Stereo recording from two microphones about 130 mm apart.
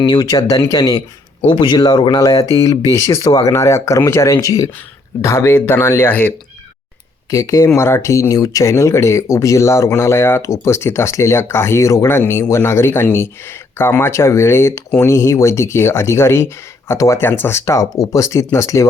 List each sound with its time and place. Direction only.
0.0 s speech: 35° left (ahead or behind); by 6.3 s 15° left (ahead or behind)
7.3 s speech: 25° left (ahead or behind)